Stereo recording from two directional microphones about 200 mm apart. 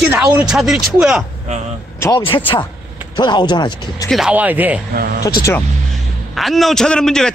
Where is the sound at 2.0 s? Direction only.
20° left (ahead or behind).